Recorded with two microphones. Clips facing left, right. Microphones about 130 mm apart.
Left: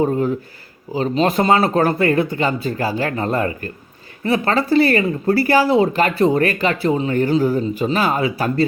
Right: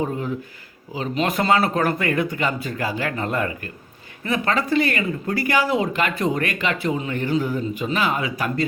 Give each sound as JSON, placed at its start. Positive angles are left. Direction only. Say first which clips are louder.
{"t": 0.9, "sound": "speech", "louder": "left 6 dB", "side_deg": 35}